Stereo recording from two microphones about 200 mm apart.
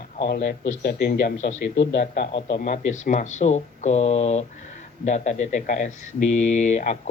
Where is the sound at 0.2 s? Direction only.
50° left (ahead or behind).